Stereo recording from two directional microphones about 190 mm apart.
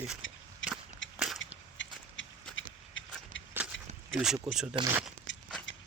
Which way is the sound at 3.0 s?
80° left.